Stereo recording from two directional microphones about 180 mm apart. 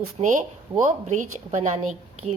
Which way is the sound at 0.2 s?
35° right (ahead or behind).